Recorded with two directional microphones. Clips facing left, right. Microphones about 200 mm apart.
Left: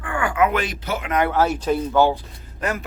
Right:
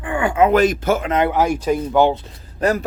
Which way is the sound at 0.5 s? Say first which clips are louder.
Right 9 dB; 45° right (ahead or behind).